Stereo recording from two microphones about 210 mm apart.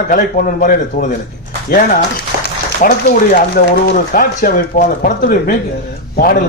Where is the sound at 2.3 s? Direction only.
50° right (ahead or behind).